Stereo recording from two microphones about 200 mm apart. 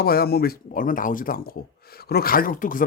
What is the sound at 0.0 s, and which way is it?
A man's voice, 50° left (ahead or behind).